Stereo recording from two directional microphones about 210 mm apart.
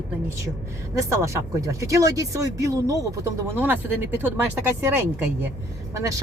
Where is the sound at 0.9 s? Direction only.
15° right (ahead or behind).